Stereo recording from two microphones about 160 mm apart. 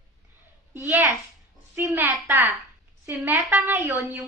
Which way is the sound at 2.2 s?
15° right (ahead or behind).